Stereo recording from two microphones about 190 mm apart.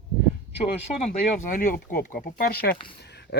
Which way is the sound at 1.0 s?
40° left (ahead or behind).